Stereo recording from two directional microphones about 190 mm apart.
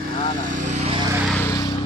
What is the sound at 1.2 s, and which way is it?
Vehicle, 10° left (ahead or behind).